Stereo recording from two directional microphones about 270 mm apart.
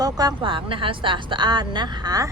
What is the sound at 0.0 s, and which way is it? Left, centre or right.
Speech, centre.